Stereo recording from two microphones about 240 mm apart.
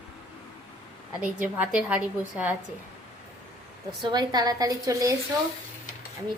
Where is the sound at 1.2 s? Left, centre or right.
Centre.